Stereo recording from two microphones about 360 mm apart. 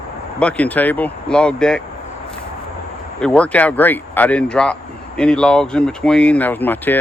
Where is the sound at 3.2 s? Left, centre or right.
Centre.